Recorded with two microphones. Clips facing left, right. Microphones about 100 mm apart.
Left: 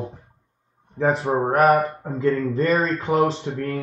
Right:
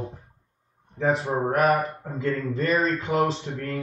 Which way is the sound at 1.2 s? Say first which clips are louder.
Left 6 dB; 30° left (ahead or behind).